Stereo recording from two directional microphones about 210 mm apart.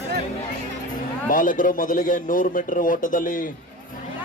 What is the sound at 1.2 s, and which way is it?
Speech, 40° left (ahead or behind).